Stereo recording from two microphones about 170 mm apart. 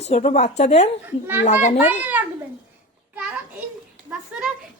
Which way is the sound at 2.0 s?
10° right (ahead or behind).